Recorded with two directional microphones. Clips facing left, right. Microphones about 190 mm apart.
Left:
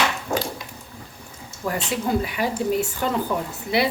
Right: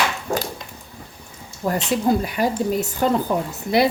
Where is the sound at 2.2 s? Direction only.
40° right (ahead or behind).